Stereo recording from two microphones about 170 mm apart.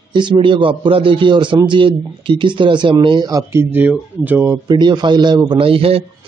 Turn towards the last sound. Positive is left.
turn(degrees=-35)  # may be behind; listen again after turning